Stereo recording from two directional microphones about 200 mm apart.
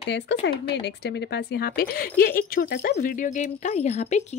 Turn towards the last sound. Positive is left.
turn(degrees=35)  # may be behind; listen again after turning